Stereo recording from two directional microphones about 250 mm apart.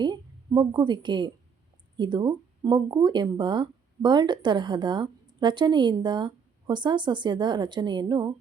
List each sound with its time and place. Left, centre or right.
0.0 s a woman's voice: centre